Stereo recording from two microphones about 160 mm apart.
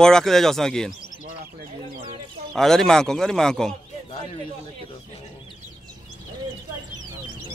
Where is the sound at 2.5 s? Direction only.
5° left (ahead or behind).